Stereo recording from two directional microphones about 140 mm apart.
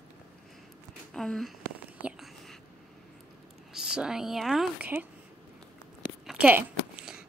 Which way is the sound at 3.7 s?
5° right (ahead or behind).